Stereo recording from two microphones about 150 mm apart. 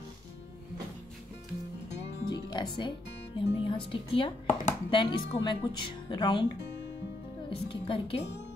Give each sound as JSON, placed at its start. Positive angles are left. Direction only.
{"t": 2.2, "sound": "music", "side_deg": 30}
{"t": 3.3, "sound": "a woman's voice", "side_deg": 35}
{"t": 7.4, "sound": "a woman's voice", "side_deg": 35}